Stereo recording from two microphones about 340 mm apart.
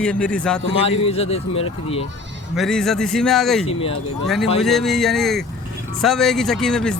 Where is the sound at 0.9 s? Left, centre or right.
Centre.